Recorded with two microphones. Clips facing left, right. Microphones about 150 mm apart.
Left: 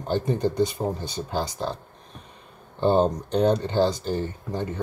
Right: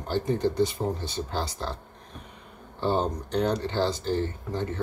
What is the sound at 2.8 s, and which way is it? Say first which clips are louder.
Speech: left 6 dB; 20° left (ahead or behind).